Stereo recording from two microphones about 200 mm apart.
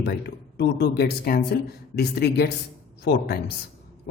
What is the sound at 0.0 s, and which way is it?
Speech, 55° left (ahead or behind).